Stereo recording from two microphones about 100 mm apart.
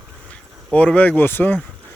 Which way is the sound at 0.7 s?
10° left (ahead or behind).